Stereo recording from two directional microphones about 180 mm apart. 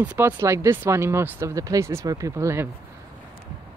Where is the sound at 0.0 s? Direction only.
10° right (ahead or behind).